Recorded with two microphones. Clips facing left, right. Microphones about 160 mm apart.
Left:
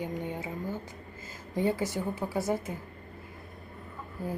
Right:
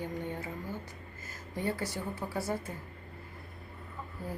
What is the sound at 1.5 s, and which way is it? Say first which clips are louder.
Speech: left 6 dB; 20° left (ahead or behind).